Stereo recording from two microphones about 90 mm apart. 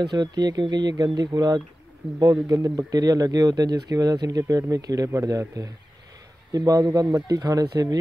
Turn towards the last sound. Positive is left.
turn(degrees=-40)  # may be behind; listen again after turning